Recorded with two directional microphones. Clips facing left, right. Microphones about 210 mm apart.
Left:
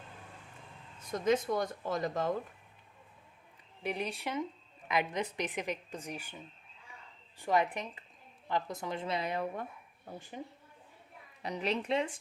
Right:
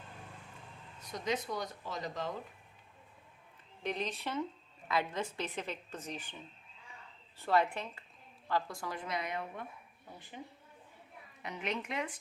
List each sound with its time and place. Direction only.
1.0 s speech: 50° left (ahead or behind)
3.8 s a woman's voice: 10° left (ahead or behind)
7.3 s a woman's voice: 15° left (ahead or behind); by 9.6 s 35° left (ahead or behind)
11.4 s a woman's voice: 35° left (ahead or behind)